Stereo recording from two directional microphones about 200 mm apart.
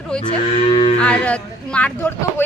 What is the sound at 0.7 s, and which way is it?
Cattle, 30° left (ahead or behind).